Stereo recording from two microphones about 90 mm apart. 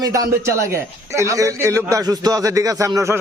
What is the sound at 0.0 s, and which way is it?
A man's voice, 40° right (ahead or behind).